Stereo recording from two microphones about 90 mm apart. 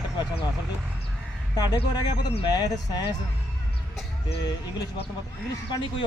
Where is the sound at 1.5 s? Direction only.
45° left (ahead or behind).